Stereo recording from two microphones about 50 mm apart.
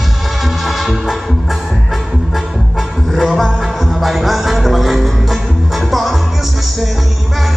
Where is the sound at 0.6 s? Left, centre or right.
Centre.